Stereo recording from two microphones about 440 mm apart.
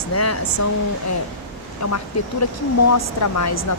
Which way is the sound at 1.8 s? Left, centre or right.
Left.